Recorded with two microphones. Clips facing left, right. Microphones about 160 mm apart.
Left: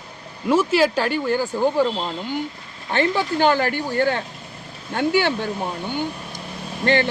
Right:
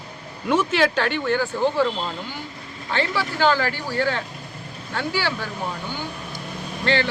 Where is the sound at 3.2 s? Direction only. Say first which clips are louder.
Even; 20° left (ahead or behind).